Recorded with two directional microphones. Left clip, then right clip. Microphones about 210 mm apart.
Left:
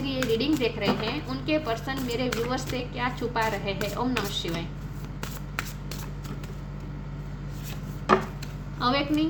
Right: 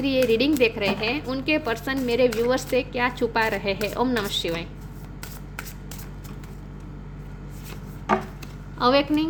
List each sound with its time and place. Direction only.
0.0 s a woman's voice: 50° right (ahead or behind)
8.8 s a woman's voice: 50° right (ahead or behind)